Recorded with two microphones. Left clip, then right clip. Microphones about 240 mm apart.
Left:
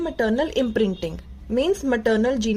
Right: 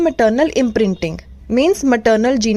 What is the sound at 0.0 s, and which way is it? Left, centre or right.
A woman's voice, right.